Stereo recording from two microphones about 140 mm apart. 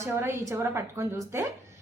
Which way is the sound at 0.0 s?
20° right (ahead or behind).